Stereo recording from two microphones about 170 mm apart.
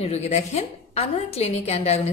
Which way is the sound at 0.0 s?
40° left (ahead or behind).